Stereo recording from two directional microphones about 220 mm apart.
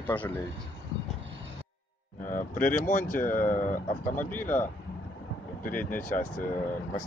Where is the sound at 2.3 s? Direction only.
40° left (ahead or behind).